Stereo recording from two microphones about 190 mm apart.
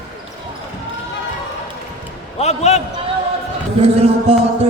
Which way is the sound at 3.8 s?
35° right (ahead or behind).